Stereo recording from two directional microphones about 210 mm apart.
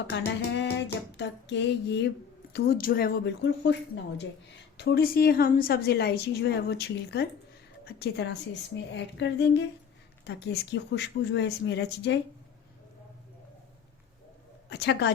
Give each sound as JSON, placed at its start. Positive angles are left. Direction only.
{"t": 0.1, "sound": "a woman's voice", "side_deg": 60}
{"t": 4.8, "sound": "a woman's voice", "side_deg": 45}
{"t": 14.7, "sound": "speech", "side_deg": 55}